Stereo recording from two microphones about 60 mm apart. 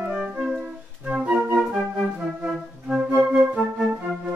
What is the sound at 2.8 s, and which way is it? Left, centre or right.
Flute, centre.